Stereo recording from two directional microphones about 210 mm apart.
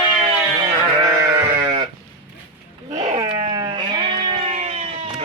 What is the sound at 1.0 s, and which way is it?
Sheep, 15° right (ahead or behind).